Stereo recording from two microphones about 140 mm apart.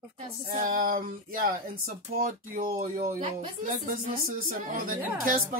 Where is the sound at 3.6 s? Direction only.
70° right (ahead or behind).